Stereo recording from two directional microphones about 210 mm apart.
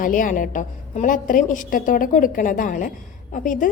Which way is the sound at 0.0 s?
40° left (ahead or behind).